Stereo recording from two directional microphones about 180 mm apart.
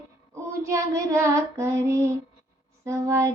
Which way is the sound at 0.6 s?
15° right (ahead or behind).